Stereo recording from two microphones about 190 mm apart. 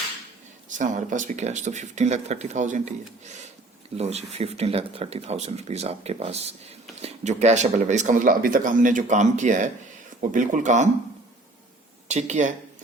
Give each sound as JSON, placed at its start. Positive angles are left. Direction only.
{"t": 0.8, "sound": "speech", "side_deg": -40}
{"t": 12.0, "sound": "speech", "side_deg": -40}